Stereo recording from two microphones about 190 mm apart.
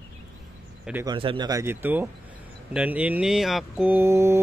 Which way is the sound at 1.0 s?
25° right (ahead or behind).